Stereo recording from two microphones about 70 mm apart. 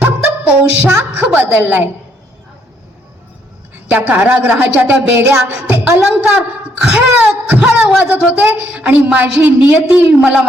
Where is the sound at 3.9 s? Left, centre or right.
Right.